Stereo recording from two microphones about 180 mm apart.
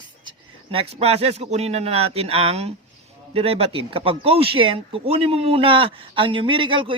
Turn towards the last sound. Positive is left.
turn(degrees=-30)  # may be behind; listen again after turning